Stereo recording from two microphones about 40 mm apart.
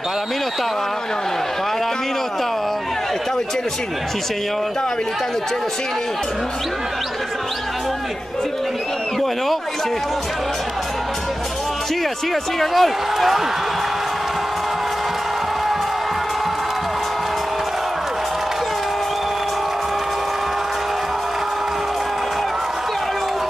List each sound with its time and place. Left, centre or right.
12.5 s speech: centre